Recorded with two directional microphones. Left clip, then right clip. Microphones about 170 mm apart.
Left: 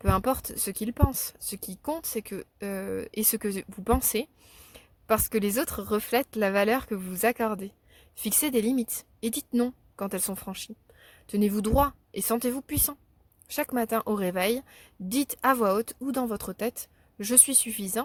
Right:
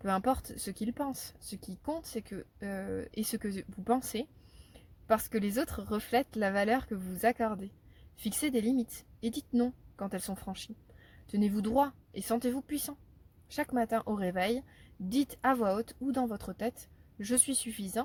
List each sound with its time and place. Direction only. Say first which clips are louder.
0.0 s a woman's voice: left 4 dB; 40° left (ahead or behind)